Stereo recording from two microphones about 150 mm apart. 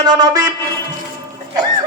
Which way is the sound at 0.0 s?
30° right (ahead or behind).